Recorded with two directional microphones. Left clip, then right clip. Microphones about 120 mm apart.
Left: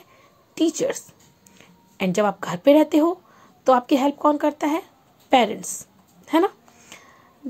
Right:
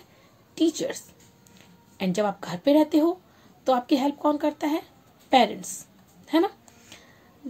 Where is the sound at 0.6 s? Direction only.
45° left (ahead or behind).